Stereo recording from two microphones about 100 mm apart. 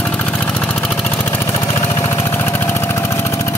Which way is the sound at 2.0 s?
30° left (ahead or behind).